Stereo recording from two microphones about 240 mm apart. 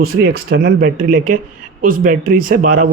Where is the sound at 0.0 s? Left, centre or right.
Right.